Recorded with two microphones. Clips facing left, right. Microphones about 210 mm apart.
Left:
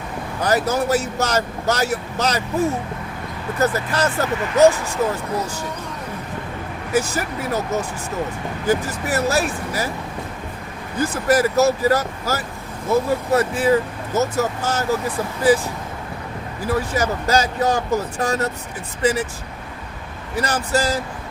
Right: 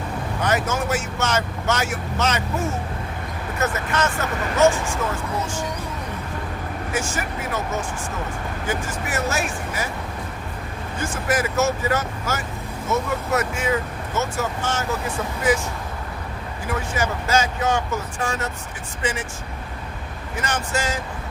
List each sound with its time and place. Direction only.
0.4 s speech: 35° left (ahead or behind)
6.9 s speech: 35° left (ahead or behind)
10.9 s speech: 35° left (ahead or behind)
16.6 s speech: 35° left (ahead or behind)
20.3 s speech: 35° left (ahead or behind)